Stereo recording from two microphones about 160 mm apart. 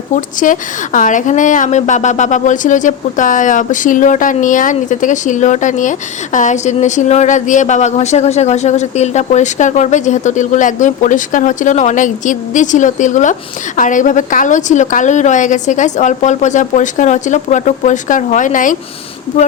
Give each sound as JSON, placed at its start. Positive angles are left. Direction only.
{"t": 0.1, "sound": "a woman's voice", "side_deg": 55}